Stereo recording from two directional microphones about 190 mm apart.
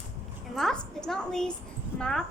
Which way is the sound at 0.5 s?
Centre (ahead or behind).